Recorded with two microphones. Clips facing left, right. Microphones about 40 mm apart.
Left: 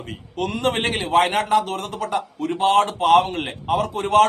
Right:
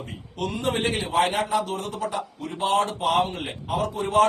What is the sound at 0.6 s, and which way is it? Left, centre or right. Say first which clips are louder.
A man's voice: left 3 dB; left.